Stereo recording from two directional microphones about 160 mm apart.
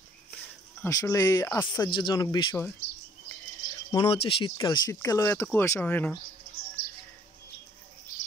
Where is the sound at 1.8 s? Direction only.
30° left (ahead or behind).